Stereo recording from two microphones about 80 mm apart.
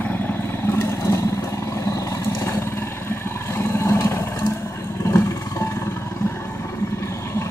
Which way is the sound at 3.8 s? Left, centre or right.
Left.